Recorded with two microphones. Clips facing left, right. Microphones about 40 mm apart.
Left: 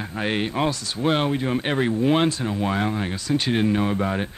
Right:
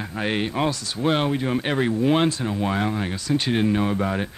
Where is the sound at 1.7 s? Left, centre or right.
Centre.